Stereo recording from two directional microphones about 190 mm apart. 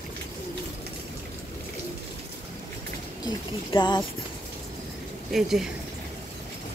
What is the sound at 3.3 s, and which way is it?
Speech, 25° left (ahead or behind).